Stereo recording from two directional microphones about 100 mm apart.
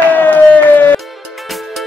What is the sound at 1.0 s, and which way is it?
Music, centre (ahead or behind).